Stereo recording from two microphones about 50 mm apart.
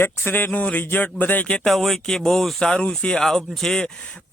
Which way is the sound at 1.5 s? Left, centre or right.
Centre.